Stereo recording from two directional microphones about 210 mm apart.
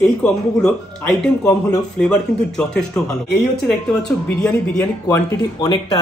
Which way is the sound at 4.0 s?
5° left (ahead or behind).